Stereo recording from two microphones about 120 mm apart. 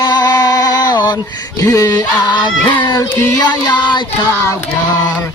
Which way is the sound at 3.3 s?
35° left (ahead or behind).